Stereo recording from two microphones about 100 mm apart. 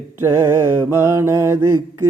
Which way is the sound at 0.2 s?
25° right (ahead or behind).